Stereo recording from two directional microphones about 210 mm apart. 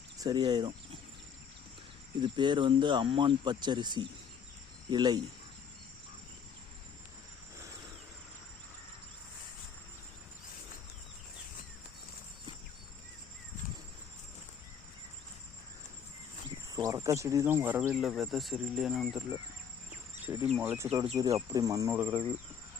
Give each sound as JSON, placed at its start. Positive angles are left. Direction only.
{"t": 0.2, "sound": "speech", "side_deg": -20}
{"t": 2.2, "sound": "speech", "side_deg": -20}
{"t": 16.7, "sound": "speech", "side_deg": -15}
{"t": 20.2, "sound": "insect", "side_deg": -10}
{"t": 20.9, "sound": "insect", "side_deg": -20}